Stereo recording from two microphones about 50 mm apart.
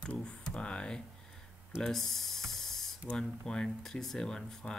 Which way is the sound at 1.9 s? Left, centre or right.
Centre.